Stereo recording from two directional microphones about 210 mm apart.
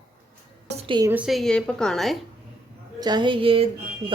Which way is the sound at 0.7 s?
25° right (ahead or behind).